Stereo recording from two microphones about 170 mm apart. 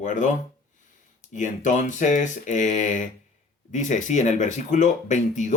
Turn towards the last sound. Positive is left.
turn(degrees=45)  # may be behind; listen again after turning